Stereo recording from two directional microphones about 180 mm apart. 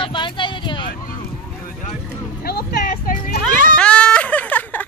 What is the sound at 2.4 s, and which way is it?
Speech, 55° left (ahead or behind).